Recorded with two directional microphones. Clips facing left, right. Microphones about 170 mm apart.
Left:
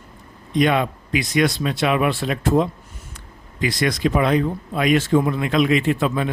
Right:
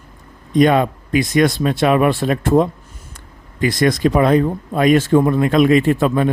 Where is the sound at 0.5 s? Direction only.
45° right (ahead or behind).